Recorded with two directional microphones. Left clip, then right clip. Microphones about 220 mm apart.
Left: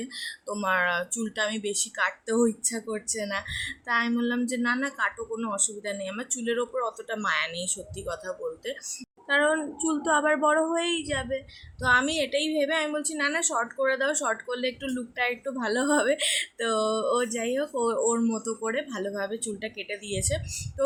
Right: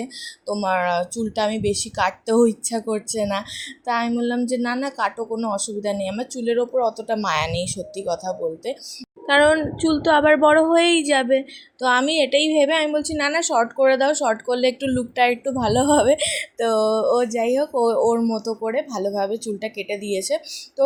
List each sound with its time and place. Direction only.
0.0 s speech: 10° right (ahead or behind)
9.2 s speech: 25° right (ahead or behind)